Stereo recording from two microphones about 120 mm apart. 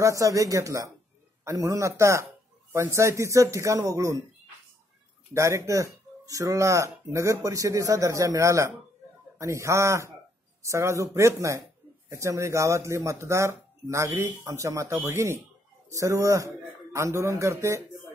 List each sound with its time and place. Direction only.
0.0 s speech: 25° right (ahead or behind)
5.3 s speech: 25° right (ahead or behind)